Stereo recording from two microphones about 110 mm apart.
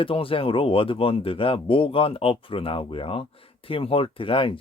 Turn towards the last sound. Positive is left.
turn(degrees=50)  # may be behind; listen again after turning